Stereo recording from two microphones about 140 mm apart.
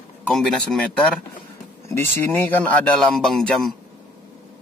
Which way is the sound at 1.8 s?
15° left (ahead or behind).